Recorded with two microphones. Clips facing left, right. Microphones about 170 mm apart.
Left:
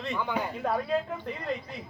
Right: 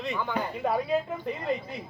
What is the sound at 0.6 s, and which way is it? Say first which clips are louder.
Speech: right 3 dB; 5° right (ahead or behind).